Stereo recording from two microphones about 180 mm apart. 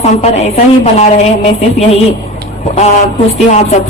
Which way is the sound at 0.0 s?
35° left (ahead or behind).